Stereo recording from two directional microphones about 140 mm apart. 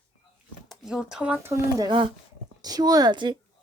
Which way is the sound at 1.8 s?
40° right (ahead or behind).